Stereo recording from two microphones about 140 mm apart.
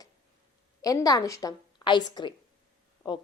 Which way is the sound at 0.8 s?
25° left (ahead or behind).